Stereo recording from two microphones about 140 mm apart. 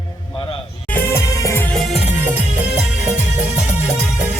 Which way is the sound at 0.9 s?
20° left (ahead or behind).